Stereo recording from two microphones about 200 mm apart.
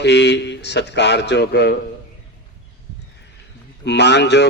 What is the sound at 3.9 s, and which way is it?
Speech, 60° left (ahead or behind).